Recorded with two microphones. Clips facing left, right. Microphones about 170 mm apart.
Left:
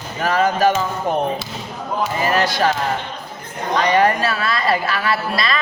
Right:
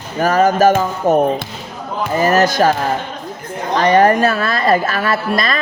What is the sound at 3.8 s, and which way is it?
Speech, 45° right (ahead or behind).